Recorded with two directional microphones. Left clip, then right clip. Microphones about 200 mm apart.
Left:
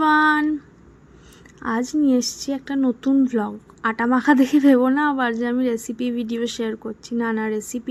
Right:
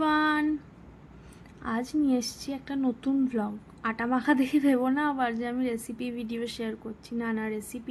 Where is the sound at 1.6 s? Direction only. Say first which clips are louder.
Left 8 dB; 25° left (ahead or behind).